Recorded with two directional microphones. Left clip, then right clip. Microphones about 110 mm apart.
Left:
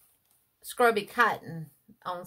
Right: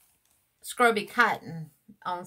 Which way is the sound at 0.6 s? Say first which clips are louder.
Right 1 dB; centre (ahead or behind).